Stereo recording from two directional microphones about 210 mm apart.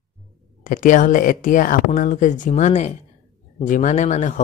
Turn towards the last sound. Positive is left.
turn(degrees=35)  # may be behind; listen again after turning